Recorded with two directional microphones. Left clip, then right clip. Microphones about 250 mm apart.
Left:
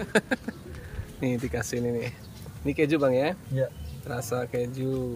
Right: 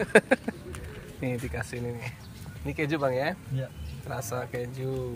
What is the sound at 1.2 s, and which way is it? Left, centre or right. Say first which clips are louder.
Speech: left 4 dB; left.